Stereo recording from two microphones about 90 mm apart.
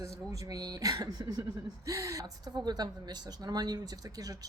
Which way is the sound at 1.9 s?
40° right (ahead or behind).